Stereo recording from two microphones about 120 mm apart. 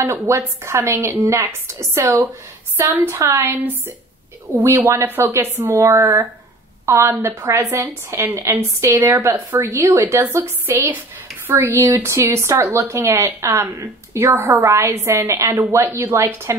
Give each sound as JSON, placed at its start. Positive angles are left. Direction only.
{"t": 0.0, "sound": "a woman's voice", "side_deg": -20}